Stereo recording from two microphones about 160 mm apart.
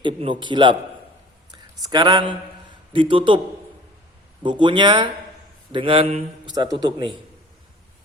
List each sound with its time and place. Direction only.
0.0 s a man's voice: 30° right (ahead or behind)
4.6 s a man's voice: 30° right (ahead or behind)
6.4 s a man's voice: 25° right (ahead or behind)